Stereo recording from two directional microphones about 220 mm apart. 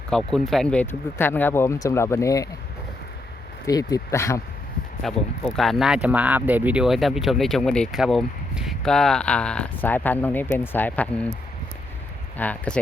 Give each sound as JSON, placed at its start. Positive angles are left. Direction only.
{"t": 0.3, "sound": "speech", "side_deg": 0}
{"t": 3.7, "sound": "speech", "side_deg": 15}
{"t": 5.0, "sound": "speech", "side_deg": 0}
{"t": 12.4, "sound": "speech", "side_deg": 5}